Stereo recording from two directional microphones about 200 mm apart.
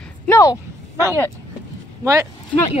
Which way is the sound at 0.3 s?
15° left (ahead or behind).